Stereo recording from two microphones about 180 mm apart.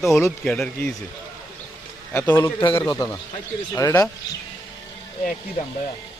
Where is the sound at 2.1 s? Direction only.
10° left (ahead or behind).